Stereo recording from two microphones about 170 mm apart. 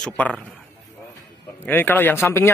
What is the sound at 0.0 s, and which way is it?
Speech, 5° left (ahead or behind).